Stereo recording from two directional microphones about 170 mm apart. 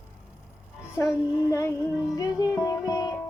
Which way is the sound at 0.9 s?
20° left (ahead or behind).